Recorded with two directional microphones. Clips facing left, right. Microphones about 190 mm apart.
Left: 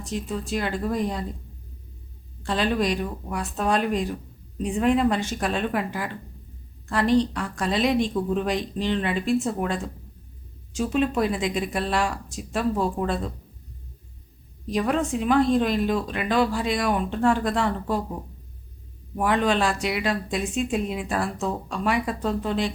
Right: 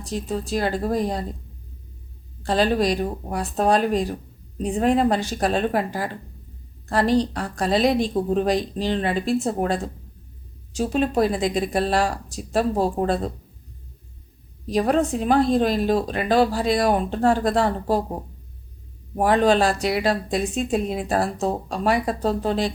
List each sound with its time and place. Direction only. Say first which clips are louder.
0.0 s speech: right 3 dB; 35° right (ahead or behind)
2.4 s speech: right 4 dB; 35° right (ahead or behind)
14.7 s speech: right 4 dB; 35° right (ahead or behind)